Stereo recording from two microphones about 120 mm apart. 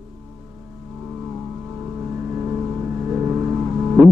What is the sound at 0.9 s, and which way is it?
Vehicle, 15° right (ahead or behind).